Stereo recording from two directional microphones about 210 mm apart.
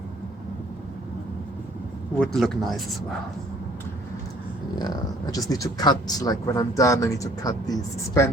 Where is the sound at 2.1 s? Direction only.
Centre (ahead or behind).